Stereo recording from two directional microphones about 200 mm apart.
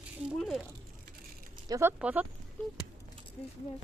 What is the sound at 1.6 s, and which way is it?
Speech, 15° right (ahead or behind).